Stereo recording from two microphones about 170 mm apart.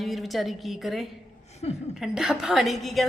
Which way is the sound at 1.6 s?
40° left (ahead or behind).